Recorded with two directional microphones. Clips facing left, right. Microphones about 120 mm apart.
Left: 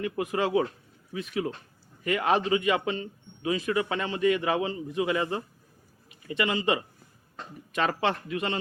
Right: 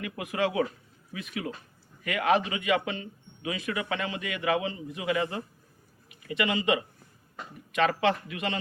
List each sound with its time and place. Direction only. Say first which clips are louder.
0.0 s a man's voice: left 2 dB; 30° left (ahead or behind)